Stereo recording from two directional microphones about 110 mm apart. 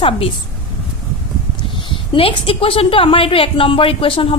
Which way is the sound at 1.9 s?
55° left (ahead or behind).